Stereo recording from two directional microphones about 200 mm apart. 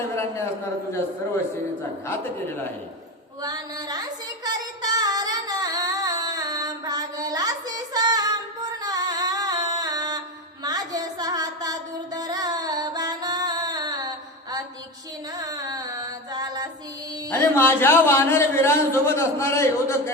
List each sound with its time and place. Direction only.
3.4 s child singing: 20° right (ahead or behind)
8.8 s female singing: 20° right (ahead or behind)
15.4 s carnatic music: 20° right (ahead or behind)
17.2 s a man's voice: 10° left (ahead or behind)